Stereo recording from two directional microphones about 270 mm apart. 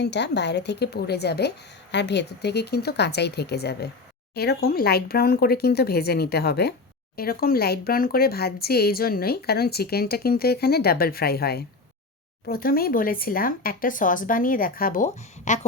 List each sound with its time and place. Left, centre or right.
0.0 s speech: left